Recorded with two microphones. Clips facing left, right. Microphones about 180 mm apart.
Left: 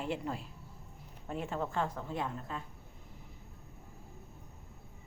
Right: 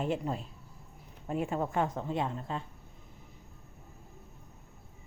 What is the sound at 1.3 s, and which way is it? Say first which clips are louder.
A woman's voice: right 5 dB; 10° right (ahead or behind).